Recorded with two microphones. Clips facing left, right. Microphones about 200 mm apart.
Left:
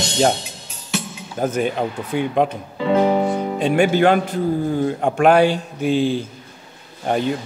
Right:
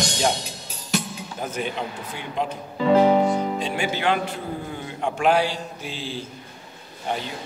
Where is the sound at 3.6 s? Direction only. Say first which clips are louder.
Left 10 dB; 55° left (ahead or behind).